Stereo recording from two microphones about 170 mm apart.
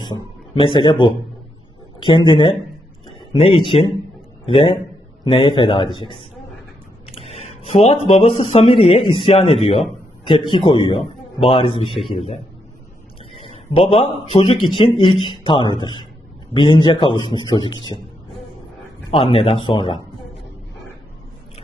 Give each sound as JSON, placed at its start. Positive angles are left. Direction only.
{"t": 0.0, "sound": "a man's voice", "side_deg": 30}
{"t": 13.3, "sound": "a sound", "side_deg": 30}
{"t": 14.3, "sound": "a man's voice", "side_deg": 35}
{"t": 19.1, "sound": "a man's voice", "side_deg": 30}